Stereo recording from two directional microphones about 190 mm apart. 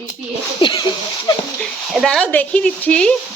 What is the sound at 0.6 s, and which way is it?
Speech, 25° left (ahead or behind).